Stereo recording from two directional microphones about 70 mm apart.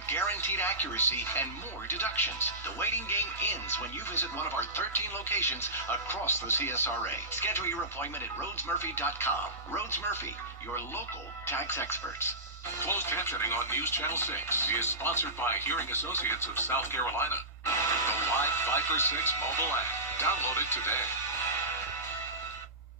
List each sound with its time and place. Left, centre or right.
0.1 s music: left
1.9 s speech: left
11.4 s speech: left